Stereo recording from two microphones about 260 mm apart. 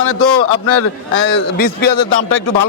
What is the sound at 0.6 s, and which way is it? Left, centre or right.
A man's voice, left.